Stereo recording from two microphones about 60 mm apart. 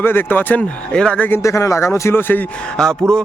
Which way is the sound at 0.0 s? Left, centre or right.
Left.